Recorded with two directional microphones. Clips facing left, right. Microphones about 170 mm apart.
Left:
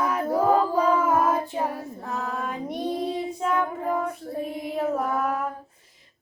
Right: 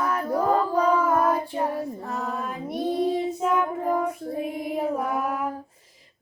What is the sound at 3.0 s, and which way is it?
Child singing, 5° right (ahead or behind).